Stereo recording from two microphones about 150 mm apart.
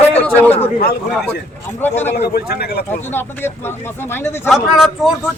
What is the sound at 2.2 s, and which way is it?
Speech, 90° left.